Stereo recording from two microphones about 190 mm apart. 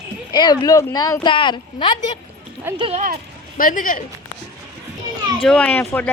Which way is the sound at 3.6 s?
45° left (ahead or behind).